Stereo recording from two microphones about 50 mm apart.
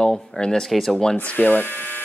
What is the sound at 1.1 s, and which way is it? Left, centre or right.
Speech, left.